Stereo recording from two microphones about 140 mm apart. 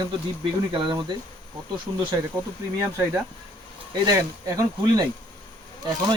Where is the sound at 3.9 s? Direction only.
25° right (ahead or behind).